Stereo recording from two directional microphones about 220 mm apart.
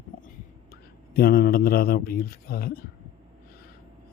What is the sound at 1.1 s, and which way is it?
A man's voice, 40° left (ahead or behind).